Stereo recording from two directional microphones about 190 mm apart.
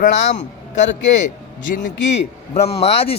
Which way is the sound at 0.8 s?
70° left (ahead or behind).